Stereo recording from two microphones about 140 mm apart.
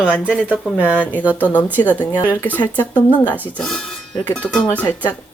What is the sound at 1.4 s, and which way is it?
Speech, 10° left (ahead or behind).